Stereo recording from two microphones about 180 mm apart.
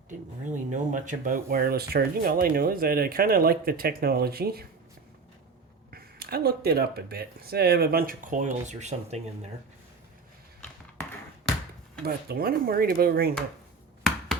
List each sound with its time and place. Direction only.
0.1 s speech: 45° right (ahead or behind)
5.9 s speech: 60° right (ahead or behind); by 9.2 s 40° right (ahead or behind)
12.0 s speech: 55° right (ahead or behind)